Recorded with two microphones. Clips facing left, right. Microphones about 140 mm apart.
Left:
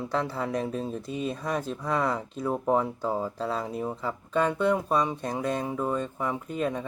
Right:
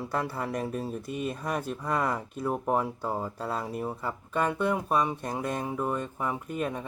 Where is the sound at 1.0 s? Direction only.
60° right (ahead or behind).